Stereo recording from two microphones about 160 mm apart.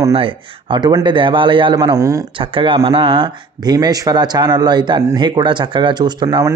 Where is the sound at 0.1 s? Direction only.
35° right (ahead or behind).